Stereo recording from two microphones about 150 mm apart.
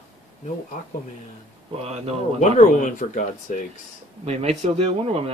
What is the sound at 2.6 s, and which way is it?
Speech, 55° left (ahead or behind).